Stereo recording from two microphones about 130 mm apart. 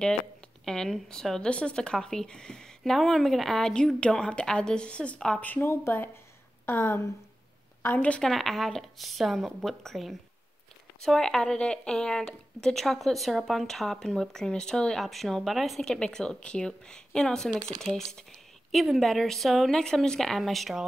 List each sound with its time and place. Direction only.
0.7 s speech: 5° left (ahead or behind)